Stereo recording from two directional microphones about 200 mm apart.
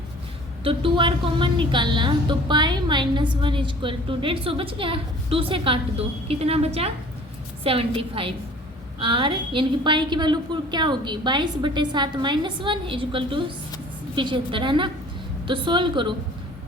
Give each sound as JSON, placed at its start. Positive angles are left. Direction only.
{"t": 0.6, "sound": "a woman's voice", "side_deg": -25}